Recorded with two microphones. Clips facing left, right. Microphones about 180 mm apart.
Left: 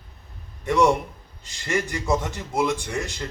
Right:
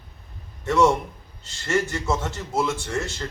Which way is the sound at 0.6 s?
15° left (ahead or behind).